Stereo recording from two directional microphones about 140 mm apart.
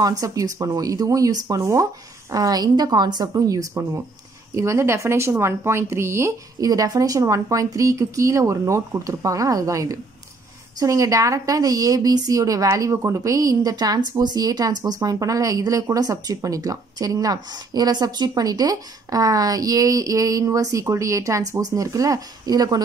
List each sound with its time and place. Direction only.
0.0 s speech: 25° right (ahead or behind)